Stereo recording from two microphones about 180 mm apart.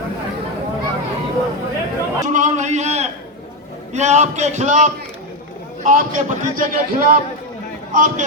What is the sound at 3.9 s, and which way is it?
A man's voice, 40° right (ahead or behind).